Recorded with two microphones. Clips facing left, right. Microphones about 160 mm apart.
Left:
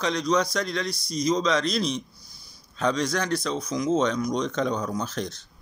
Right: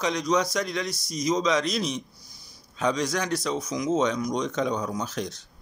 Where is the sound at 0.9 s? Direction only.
45° right (ahead or behind).